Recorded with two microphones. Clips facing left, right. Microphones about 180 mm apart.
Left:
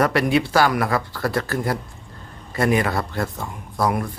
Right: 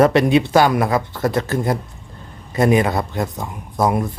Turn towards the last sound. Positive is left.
turn(degrees=-20)  # may be behind; listen again after turning